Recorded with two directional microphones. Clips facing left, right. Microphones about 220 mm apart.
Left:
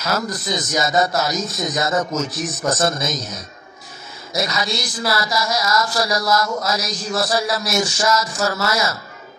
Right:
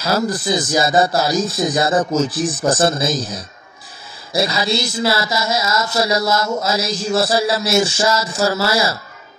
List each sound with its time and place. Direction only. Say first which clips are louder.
0.0 s a man's voice: right 5 dB; 30° right (ahead or behind)